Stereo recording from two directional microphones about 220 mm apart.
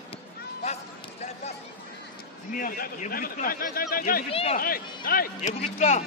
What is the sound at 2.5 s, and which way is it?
Speech, 40° left (ahead or behind).